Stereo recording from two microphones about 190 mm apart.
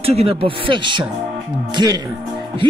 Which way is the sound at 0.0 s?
30° right (ahead or behind).